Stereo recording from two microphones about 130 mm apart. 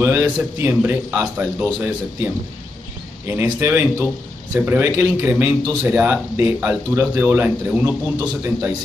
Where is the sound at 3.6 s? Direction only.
15° right (ahead or behind).